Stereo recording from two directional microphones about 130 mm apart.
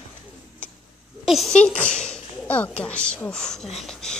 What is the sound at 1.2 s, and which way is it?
Speech, centre (ahead or behind).